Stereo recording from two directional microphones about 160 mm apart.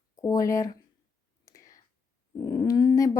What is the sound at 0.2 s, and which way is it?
Speech, 20° left (ahead or behind).